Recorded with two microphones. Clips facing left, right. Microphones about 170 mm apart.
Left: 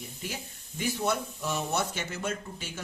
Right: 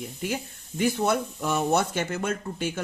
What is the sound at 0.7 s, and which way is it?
Speech, 55° right (ahead or behind).